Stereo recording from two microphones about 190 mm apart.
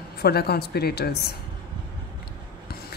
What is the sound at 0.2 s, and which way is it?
A woman's voice, 55° left (ahead or behind).